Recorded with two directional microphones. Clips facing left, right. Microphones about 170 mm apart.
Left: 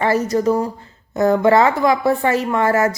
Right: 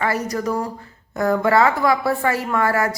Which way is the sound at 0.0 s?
25° left (ahead or behind).